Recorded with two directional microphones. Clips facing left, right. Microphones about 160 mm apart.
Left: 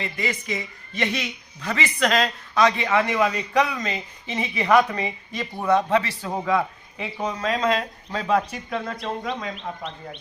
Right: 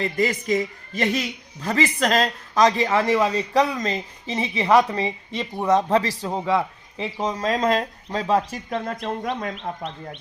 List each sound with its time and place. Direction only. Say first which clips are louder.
0.0 s a woman's voice: right 6 dB; 40° right (ahead or behind); by 5.8 s 25° right (ahead or behind)
5.9 s a woman's voice: right 2 dB; 35° right (ahead or behind)
6.3 s a woman's voice: even; 25° right (ahead or behind); by 10.2 s 50° right (ahead or behind)